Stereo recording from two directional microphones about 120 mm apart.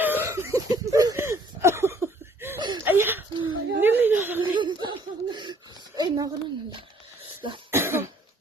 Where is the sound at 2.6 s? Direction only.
40° right (ahead or behind).